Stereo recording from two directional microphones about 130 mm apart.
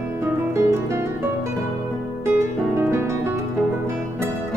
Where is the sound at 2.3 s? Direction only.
20° right (ahead or behind).